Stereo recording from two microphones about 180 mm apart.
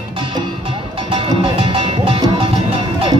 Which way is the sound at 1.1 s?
30° right (ahead or behind).